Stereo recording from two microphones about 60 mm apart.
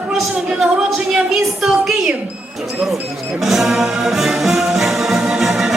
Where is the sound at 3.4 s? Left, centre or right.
Centre.